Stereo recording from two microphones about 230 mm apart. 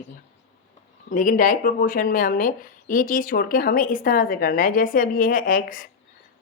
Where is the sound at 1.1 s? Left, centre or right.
Left.